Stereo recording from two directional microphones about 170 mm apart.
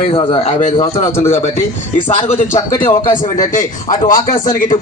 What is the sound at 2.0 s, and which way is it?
A man's voice, 40° left (ahead or behind).